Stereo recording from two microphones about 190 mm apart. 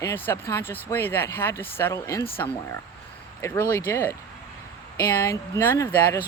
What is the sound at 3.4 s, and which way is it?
Speech, 15° left (ahead or behind).